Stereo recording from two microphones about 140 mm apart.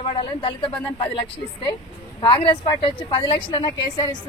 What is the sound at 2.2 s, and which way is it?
A woman's voice, 35° left (ahead or behind).